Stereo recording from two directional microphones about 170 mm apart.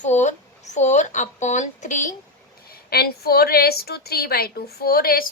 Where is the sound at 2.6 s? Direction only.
65° left (ahead or behind).